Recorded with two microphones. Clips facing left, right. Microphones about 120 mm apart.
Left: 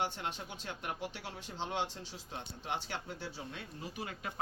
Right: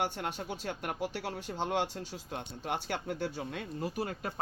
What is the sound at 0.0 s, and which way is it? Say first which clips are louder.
Speech: right 3 dB; 45° right (ahead or behind).